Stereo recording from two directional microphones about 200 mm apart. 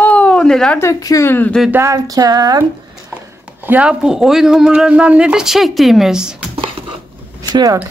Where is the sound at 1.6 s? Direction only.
10° right (ahead or behind).